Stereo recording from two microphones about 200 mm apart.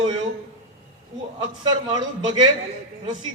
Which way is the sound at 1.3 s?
20° right (ahead or behind).